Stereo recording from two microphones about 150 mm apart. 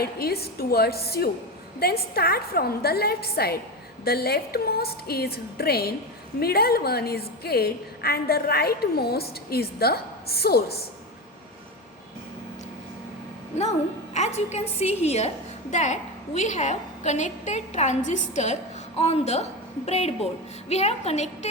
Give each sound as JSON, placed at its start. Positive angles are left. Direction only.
{"t": 0.0, "sound": "a woman's voice", "side_deg": 90}
{"t": 13.6, "sound": "a woman's voice", "side_deg": 50}